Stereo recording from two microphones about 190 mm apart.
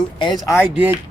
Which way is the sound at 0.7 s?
10° right (ahead or behind).